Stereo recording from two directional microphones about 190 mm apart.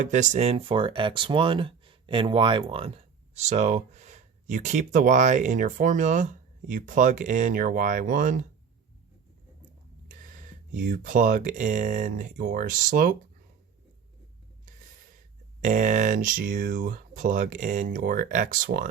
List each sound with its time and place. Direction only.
0.0 s speech: 40° right (ahead or behind)
10.1 s speech: 45° right (ahead or behind)
15.6 s speech: 40° right (ahead or behind)